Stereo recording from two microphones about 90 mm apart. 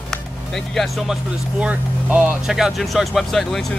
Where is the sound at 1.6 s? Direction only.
15° right (ahead or behind).